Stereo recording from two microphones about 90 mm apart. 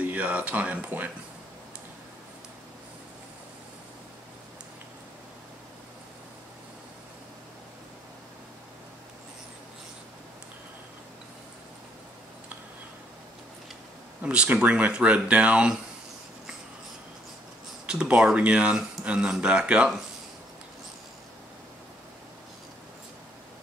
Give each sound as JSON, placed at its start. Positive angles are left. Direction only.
{"t": 0.0, "sound": "speech", "side_deg": -15}
{"t": 14.2, "sound": "speech", "side_deg": -15}
{"t": 17.8, "sound": "speech", "side_deg": -10}